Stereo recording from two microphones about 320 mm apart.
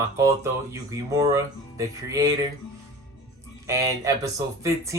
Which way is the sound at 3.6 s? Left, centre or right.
Centre.